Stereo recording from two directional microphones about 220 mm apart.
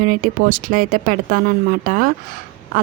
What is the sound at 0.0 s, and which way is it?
A woman's voice, 40° right (ahead or behind).